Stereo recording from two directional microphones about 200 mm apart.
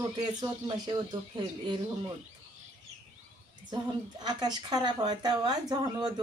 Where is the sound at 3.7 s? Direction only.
20° right (ahead or behind).